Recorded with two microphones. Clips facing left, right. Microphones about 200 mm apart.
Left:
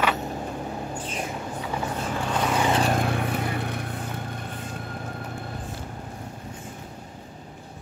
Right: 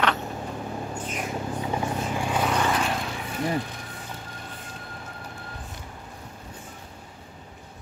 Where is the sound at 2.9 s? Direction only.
55° left (ahead or behind).